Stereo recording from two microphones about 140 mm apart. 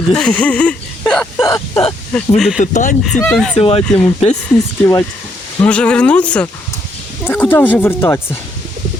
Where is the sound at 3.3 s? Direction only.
5° left (ahead or behind).